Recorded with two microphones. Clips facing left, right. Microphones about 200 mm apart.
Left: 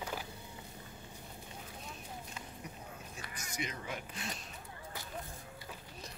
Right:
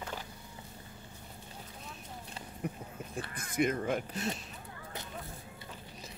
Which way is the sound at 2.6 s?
55° right (ahead or behind).